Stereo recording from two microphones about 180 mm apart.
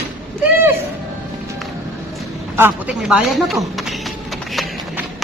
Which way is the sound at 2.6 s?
10° right (ahead or behind).